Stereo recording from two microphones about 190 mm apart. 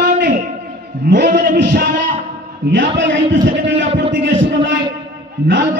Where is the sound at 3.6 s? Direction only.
70° right (ahead or behind).